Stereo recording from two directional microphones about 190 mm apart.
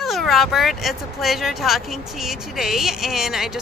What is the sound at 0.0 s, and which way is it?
Speech, centre (ahead or behind).